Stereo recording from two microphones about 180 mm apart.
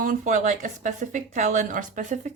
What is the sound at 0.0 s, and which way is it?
A woman's voice, 45° right (ahead or behind).